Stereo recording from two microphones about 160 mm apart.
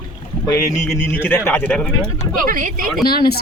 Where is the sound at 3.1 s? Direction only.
75° left (ahead or behind).